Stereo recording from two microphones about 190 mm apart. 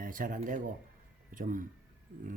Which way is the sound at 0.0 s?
45° right (ahead or behind).